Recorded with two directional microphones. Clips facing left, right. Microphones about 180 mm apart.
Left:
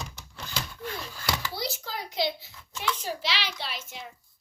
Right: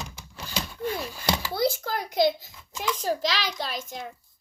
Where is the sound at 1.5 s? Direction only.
50° right (ahead or behind).